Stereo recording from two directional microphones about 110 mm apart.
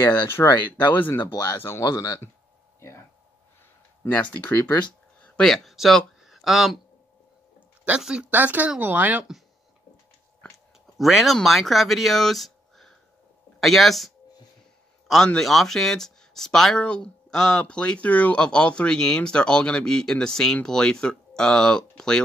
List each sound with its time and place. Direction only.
0.4 s speech: 20° left (ahead or behind)
4.0 s speech: 15° left (ahead or behind)
4.6 s speech: 40° left (ahead or behind)
5.2 s speech: 10° left (ahead or behind)
7.8 s speech: 10° right (ahead or behind)
11.0 s speech: centre (ahead or behind)